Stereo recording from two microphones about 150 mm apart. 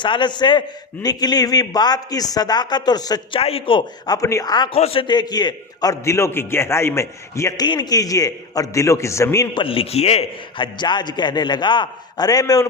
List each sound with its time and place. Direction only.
0.0 s a man's voice: 30° left (ahead or behind)
3.4 s a man's voice: 35° left (ahead or behind)
4.7 s a man's voice: 40° left (ahead or behind); by 9.5 s 20° left (ahead or behind)
9.6 s a man's voice: 40° left (ahead or behind)